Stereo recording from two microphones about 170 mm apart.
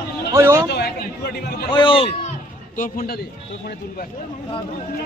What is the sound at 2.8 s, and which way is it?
Speech, 55° left (ahead or behind).